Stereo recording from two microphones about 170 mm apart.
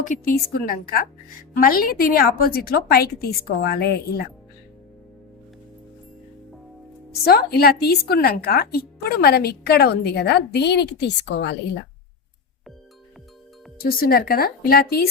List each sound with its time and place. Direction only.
0.0 s a woman's voice: 50° left (ahead or behind); by 4.3 s 70° left (ahead or behind)
7.3 s speech: 70° left (ahead or behind); by 11.5 s 90° left
13.7 s a woman's voice: 60° left (ahead or behind)